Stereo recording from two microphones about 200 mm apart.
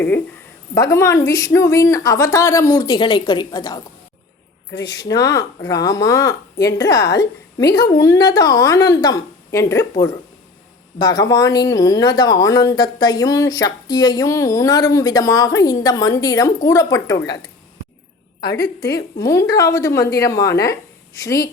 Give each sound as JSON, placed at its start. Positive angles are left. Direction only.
{"t": 0.7, "sound": "speech", "side_deg": 15}
{"t": 4.9, "sound": "speech", "side_deg": 15}
{"t": 10.9, "sound": "speech", "side_deg": 20}
{"t": 19.2, "sound": "a woman's voice", "side_deg": 15}